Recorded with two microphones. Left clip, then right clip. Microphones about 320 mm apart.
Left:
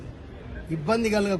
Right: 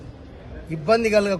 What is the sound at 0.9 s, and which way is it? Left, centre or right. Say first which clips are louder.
Speech: right 6 dB; centre.